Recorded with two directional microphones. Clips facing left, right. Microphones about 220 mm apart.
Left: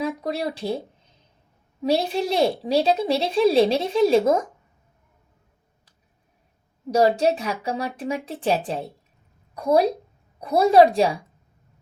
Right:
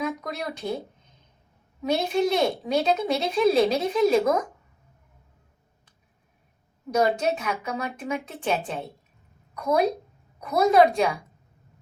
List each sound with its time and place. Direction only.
0.0 s speech: 30° left (ahead or behind)
1.8 s a woman's voice: 30° left (ahead or behind)
6.9 s a woman's voice: 35° left (ahead or behind)